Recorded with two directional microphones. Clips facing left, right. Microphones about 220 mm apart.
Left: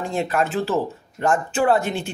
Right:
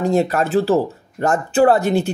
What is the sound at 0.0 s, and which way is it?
Speech, 40° right (ahead or behind).